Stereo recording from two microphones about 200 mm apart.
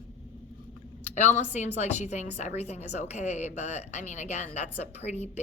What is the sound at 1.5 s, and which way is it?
Speech, 35° left (ahead or behind).